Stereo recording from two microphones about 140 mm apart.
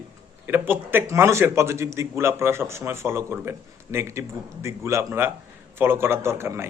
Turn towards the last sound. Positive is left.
turn(degrees=-20)  # may be behind; listen again after turning